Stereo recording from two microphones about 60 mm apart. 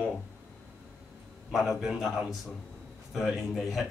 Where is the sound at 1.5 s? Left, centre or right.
Centre.